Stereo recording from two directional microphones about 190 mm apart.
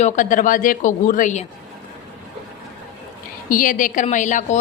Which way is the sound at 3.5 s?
45° left (ahead or behind).